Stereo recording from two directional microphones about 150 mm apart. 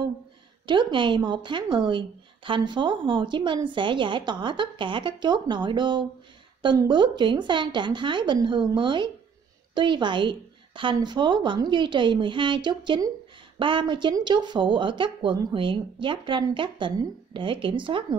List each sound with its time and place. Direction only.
0.7 s speech: 30° right (ahead or behind)